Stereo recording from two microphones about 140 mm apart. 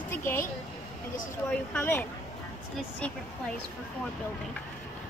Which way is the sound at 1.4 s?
10° left (ahead or behind).